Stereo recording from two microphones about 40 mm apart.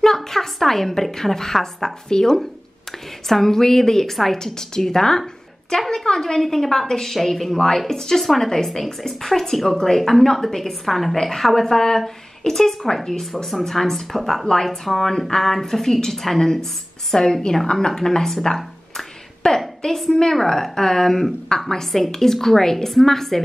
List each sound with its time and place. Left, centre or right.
0.0 s a woman's voice: centre